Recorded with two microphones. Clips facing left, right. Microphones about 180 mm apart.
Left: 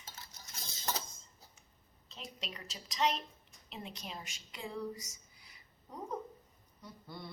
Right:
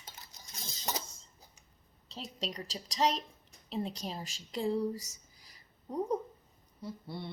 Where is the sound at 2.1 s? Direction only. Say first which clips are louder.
Right 7 dB; 35° right (ahead or behind).